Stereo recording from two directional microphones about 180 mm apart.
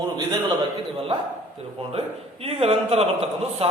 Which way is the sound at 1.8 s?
35° right (ahead or behind).